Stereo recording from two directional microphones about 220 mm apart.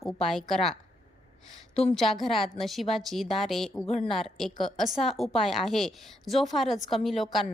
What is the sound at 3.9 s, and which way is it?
Speech, 30° left (ahead or behind).